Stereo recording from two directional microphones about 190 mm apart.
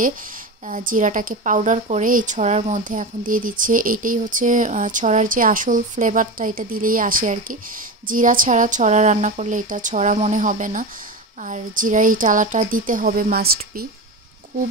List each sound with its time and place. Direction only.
0.7 s a woman's voice: 45° right (ahead or behind)